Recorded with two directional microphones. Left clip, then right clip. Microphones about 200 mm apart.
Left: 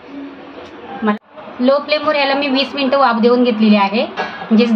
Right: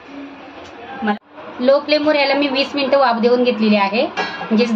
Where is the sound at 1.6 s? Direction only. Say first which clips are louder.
Even; 10° left (ahead or behind).